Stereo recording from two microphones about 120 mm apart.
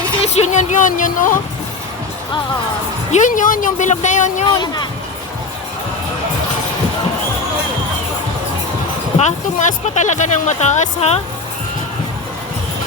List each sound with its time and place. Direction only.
0.2 s speech: 65° left (ahead or behind); by 1.4 s 90° left
3.1 s speech: 90° left
4.4 s speech: 35° left (ahead or behind)
9.1 s speech: 85° left